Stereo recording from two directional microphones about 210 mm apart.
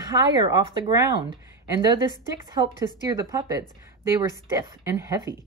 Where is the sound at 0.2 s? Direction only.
20° right (ahead or behind).